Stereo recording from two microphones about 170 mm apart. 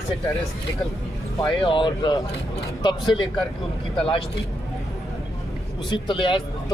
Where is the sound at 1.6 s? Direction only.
30° left (ahead or behind).